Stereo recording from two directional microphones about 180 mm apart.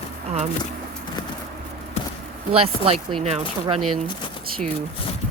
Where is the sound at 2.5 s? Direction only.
30° right (ahead or behind).